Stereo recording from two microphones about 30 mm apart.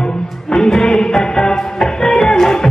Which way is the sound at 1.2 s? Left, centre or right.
Left.